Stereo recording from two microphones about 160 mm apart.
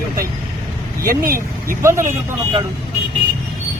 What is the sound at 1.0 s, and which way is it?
Speech, 65° right (ahead or behind).